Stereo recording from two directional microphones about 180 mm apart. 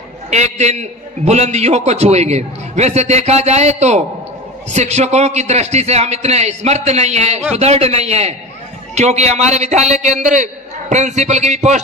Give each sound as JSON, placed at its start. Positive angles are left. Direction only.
{"t": 0.3, "sound": "a man's voice", "side_deg": -40}